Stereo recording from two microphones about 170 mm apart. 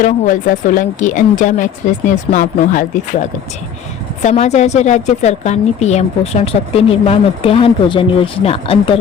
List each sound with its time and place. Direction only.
0.0 s a woman's voice: 50° left (ahead or behind); by 9.0 s 35° left (ahead or behind)